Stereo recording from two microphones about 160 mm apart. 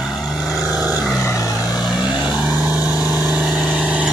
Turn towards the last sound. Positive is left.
turn(degrees=-10)  # may be behind; listen again after turning